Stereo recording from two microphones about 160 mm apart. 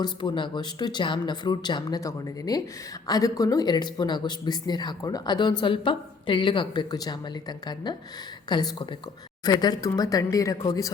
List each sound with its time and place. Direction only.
0.0 s speech: 30° left (ahead or behind)